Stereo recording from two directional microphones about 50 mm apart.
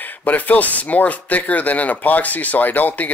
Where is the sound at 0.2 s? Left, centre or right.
Left.